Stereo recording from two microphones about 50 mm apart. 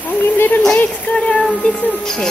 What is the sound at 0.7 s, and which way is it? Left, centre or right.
Speech, left.